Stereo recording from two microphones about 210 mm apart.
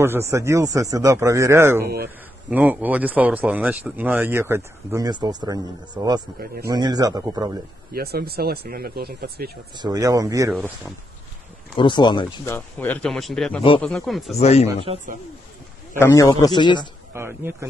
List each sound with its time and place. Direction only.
0.0 s speech: 10° right (ahead or behind)
7.9 s speech: 50° right (ahead or behind)
9.8 s speech: 20° right (ahead or behind)
11.7 s a man's voice: 20° left (ahead or behind)
12.5 s speech: 5° left (ahead or behind)
14.3 s speech: 30° left (ahead or behind)
16.0 s a man's voice: 15° left (ahead or behind)
17.1 s speech: 10° right (ahead or behind)